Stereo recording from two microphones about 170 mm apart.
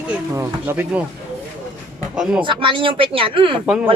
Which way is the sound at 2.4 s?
30° right (ahead or behind).